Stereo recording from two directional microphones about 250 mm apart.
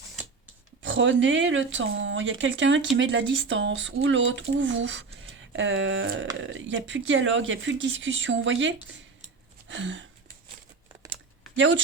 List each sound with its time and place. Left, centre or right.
0.8 s speech: right
9.6 s a sound: right
11.5 s speech: right